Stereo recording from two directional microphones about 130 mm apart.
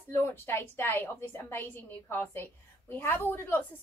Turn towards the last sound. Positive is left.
turn(degrees=15)  # may be behind; listen again after turning